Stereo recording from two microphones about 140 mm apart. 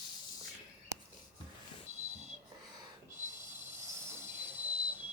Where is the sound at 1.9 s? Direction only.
55° right (ahead or behind).